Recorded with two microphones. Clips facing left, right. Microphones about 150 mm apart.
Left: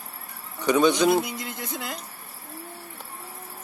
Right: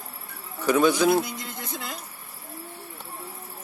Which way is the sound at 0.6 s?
5° right (ahead or behind).